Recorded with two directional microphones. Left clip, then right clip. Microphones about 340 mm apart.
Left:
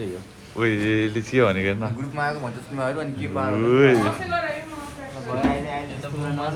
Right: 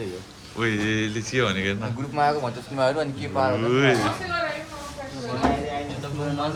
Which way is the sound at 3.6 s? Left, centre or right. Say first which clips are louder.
Left 8 dB; centre.